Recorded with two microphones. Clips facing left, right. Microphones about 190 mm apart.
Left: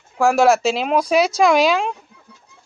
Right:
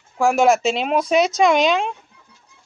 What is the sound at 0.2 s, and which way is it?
Speech, centre (ahead or behind).